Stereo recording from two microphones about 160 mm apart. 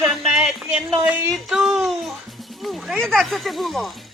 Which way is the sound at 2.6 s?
Centre (ahead or behind).